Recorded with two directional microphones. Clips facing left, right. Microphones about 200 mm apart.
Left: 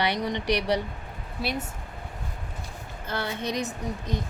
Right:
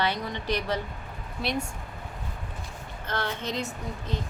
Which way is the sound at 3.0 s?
10° left (ahead or behind).